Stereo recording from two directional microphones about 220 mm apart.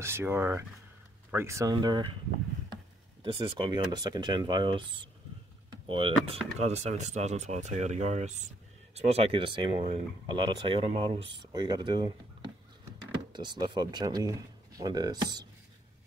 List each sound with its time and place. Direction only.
0.0 s speech: 10° right (ahead or behind)
3.2 s speech: 20° right (ahead or behind)
5.7 s vehicle: 20° right (ahead or behind)
6.6 s speech: 30° right (ahead or behind)
13.3 s speech: 20° right (ahead or behind)